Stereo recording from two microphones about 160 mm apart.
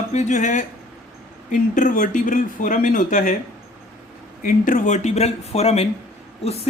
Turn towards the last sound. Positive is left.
turn(degrees=40)  # may be behind; listen again after turning